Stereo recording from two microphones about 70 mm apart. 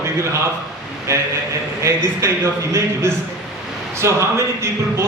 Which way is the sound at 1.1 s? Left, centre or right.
Right.